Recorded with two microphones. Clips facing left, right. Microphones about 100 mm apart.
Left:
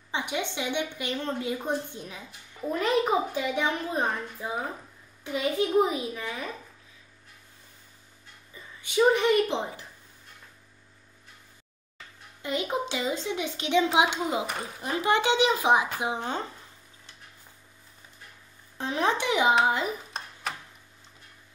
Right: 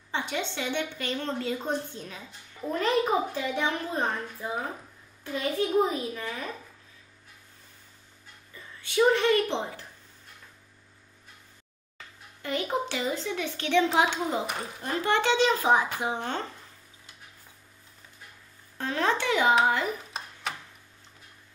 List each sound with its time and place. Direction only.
0.1 s a woman's voice: 15° left (ahead or behind)
5.2 s a woman's voice: 15° left (ahead or behind)
8.5 s a woman's voice: 15° left (ahead or behind)
12.4 s a woman's voice: 20° left (ahead or behind)
14.4 s speech: centre (ahead or behind)
14.8 s a woman's voice: 15° left (ahead or behind)
18.8 s a woman's voice: 15° left (ahead or behind)
19.9 s a sound: centre (ahead or behind)